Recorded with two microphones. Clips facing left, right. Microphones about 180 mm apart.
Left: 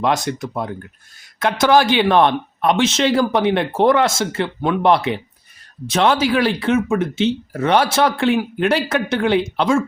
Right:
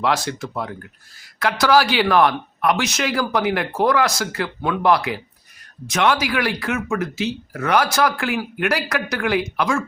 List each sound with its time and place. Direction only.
0.0 s speech: 20° left (ahead or behind)